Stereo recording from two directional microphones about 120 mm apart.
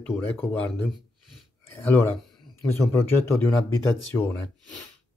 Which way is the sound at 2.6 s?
20° left (ahead or behind).